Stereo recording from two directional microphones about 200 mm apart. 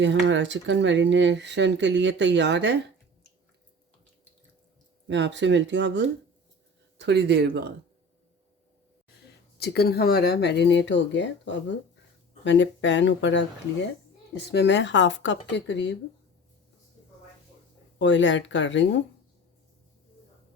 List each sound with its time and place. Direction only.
0.0 s speech: 65° right (ahead or behind)
5.0 s speech: 65° right (ahead or behind)
9.6 s speech: 55° left (ahead or behind)
14.5 s speech: 60° left (ahead or behind)
18.0 s speech: 65° left (ahead or behind)